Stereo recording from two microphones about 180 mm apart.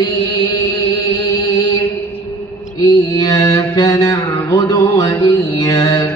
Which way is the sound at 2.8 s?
20° left (ahead or behind).